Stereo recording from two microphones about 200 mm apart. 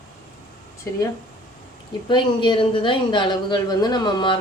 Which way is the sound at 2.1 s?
25° left (ahead or behind).